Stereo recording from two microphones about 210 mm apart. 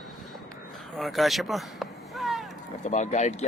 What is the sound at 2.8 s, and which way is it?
Speech, 35° left (ahead or behind).